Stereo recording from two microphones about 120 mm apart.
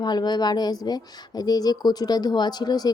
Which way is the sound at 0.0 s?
35° left (ahead or behind).